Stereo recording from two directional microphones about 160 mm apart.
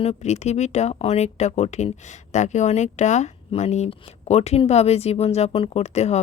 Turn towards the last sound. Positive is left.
turn(degrees=45)  # may be behind; listen again after turning